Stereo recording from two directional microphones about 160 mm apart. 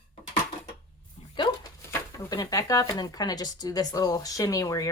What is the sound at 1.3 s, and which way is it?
Dog, 30° left (ahead or behind).